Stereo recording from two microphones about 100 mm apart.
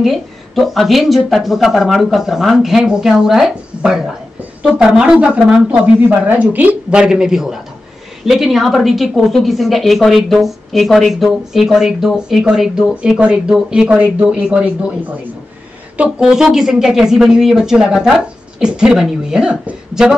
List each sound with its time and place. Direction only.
0.0 s a woman's voice: centre (ahead or behind)
16.0 s a woman's voice: 5° right (ahead or behind)